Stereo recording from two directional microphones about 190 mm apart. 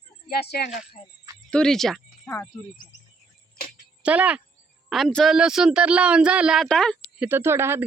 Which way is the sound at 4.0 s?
5° right (ahead or behind).